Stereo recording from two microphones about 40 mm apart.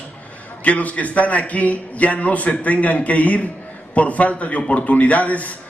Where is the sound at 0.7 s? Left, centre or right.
Left.